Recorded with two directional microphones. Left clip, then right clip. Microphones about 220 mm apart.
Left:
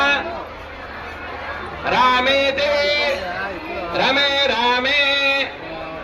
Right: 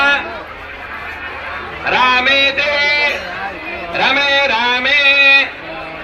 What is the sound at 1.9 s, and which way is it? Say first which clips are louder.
Speech: right 4 dB; 55° left (ahead or behind).